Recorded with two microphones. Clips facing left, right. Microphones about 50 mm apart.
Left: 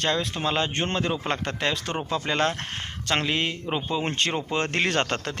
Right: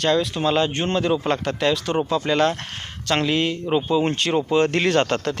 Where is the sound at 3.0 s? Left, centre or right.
Centre.